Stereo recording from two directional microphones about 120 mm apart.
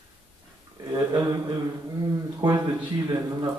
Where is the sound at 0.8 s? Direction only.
30° right (ahead or behind).